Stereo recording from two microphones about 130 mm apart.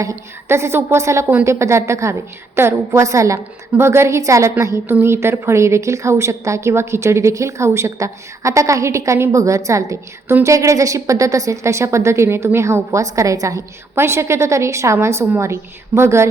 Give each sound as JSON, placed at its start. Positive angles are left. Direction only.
{"t": 0.0, "sound": "a woman's voice", "side_deg": -20}